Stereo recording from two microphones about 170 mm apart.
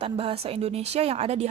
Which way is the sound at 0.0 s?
35° right (ahead or behind).